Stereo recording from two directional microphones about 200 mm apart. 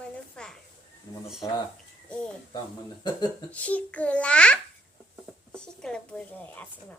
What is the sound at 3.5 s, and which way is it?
A child's voice, 5° left (ahead or behind).